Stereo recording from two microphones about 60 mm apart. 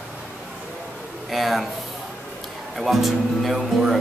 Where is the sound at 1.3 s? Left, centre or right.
Centre.